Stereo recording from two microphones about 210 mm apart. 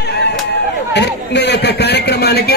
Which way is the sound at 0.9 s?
55° left (ahead or behind).